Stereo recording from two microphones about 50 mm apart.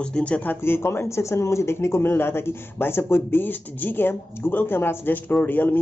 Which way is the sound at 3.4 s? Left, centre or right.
Left.